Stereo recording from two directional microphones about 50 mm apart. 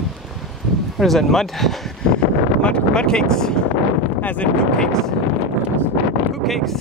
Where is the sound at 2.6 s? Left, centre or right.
Centre.